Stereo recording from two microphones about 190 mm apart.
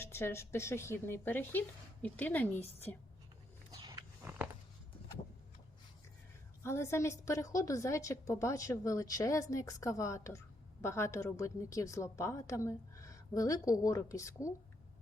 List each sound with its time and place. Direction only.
0.0 s a woman's voice: 10° left (ahead or behind)
3.7 s roaring cats: 20° right (ahead or behind)
4.2 s a sound: 10° right (ahead or behind)
6.6 s a woman's voice: 15° left (ahead or behind)